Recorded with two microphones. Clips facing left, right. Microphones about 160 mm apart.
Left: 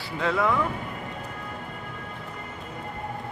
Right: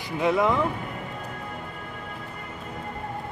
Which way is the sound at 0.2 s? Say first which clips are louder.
Right 2 dB; 20° right (ahead or behind).